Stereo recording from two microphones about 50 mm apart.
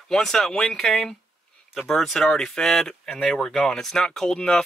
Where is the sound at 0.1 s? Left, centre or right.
Centre.